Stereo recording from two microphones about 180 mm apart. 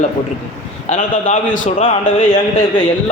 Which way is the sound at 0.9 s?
45° left (ahead or behind).